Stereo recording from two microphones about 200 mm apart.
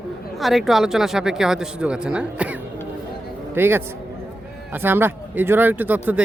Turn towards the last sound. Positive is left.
turn(degrees=-10)  # may be behind; listen again after turning